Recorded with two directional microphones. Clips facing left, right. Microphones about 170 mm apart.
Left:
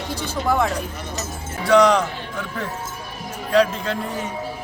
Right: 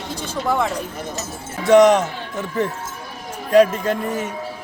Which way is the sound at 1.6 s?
20° right (ahead or behind).